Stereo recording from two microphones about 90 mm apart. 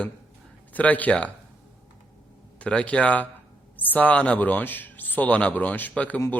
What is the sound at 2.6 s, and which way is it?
A man's voice, 15° left (ahead or behind).